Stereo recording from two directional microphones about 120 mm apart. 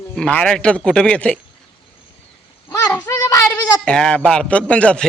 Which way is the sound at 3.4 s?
10° left (ahead or behind).